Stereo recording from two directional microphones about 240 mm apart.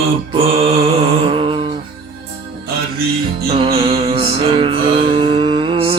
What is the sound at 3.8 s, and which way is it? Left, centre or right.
Music, right.